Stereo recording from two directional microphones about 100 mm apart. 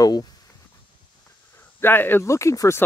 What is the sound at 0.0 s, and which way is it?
Speech, 40° left (ahead or behind).